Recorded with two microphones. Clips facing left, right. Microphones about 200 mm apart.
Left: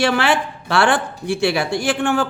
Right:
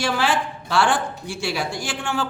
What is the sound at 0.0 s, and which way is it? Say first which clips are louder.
A woman's voice: left 4 dB; 65° left (ahead or behind).